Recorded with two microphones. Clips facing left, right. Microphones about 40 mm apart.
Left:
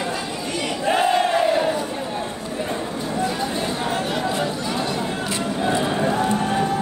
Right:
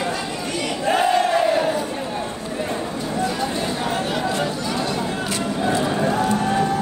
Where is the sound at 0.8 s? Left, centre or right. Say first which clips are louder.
Right 1 dB; centre.